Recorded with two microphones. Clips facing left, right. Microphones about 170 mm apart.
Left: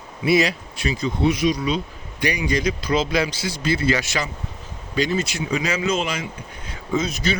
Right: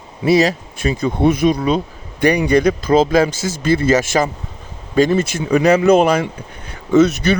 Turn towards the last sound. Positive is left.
turn(degrees=-65)  # may be behind; listen again after turning